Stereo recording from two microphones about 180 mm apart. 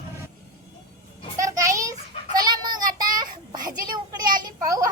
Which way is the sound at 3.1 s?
20° right (ahead or behind).